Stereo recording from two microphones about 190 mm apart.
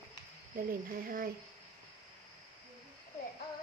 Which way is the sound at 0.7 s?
50° right (ahead or behind).